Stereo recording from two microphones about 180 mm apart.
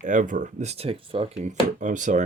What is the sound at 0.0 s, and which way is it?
Speech, 45° right (ahead or behind).